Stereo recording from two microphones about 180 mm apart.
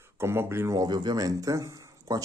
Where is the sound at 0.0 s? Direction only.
15° right (ahead or behind).